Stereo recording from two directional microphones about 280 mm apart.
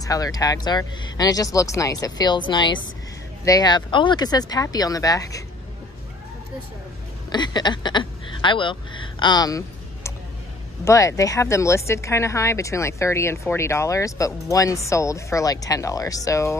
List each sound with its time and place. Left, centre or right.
0.0 s speech: centre
7.2 s speech: centre